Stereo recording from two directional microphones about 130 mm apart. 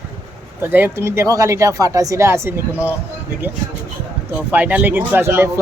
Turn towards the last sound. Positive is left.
turn(degrees=-15)  # may be behind; listen again after turning